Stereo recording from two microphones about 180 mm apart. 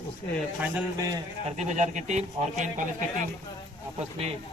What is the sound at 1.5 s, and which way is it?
Speech, 40° right (ahead or behind).